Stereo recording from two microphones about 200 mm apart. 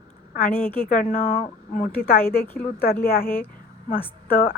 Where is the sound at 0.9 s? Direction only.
40° left (ahead or behind).